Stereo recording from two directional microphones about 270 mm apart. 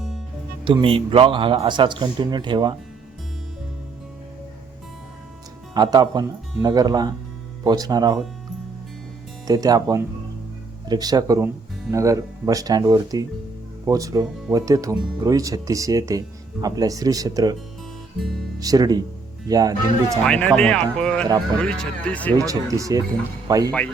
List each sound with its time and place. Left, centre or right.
0.6 s speech: centre
5.7 s speech: centre
9.5 s speech: centre
18.6 s speech: centre
20.2 s speech: centre
22.4 s speech: centre